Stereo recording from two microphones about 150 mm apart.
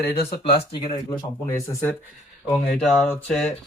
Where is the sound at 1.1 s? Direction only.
20° left (ahead or behind).